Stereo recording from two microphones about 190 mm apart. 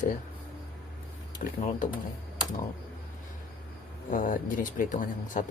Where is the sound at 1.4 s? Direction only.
45° left (ahead or behind).